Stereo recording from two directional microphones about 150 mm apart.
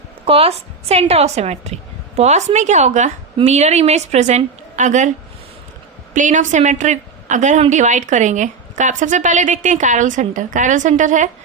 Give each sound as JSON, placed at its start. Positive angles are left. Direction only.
{"t": 0.3, "sound": "a woman's voice", "side_deg": -40}
{"t": 6.1, "sound": "a woman's voice", "side_deg": -55}